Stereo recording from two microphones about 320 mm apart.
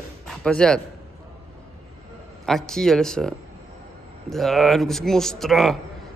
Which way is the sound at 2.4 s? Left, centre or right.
Centre.